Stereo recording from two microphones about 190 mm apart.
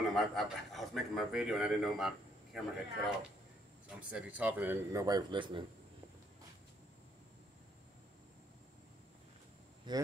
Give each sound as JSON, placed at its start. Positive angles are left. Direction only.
{"t": 0.1, "sound": "a man's voice", "side_deg": 0}
{"t": 9.9, "sound": "speech", "side_deg": -20}